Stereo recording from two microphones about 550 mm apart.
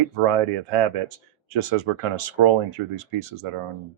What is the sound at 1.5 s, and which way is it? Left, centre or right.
Speech, right.